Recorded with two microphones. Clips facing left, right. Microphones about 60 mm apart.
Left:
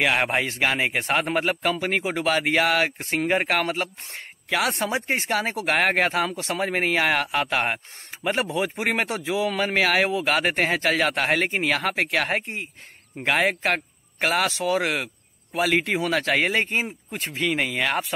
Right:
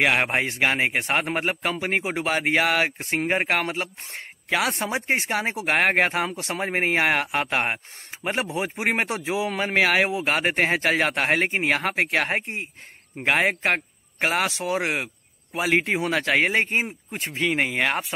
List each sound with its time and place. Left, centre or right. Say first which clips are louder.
0.1 s a man's voice: even; right
15.5 s speech: even; right